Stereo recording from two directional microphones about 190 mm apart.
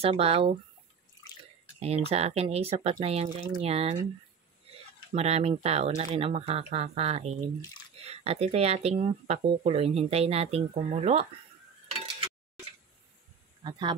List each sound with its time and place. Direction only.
0.0 s speech: 30° right (ahead or behind)
1.8 s speech: 30° right (ahead or behind)
5.1 s speech: 35° right (ahead or behind)
13.7 s speech: 25° right (ahead or behind)